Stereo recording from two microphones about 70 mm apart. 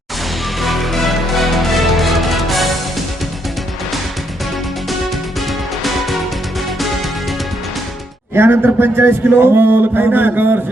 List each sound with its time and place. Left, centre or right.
0.6 s music: centre
5.5 s music: centre
8.4 s speech: right